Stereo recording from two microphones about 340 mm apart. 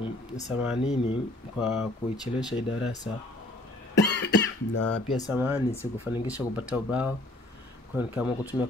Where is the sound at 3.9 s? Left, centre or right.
Left.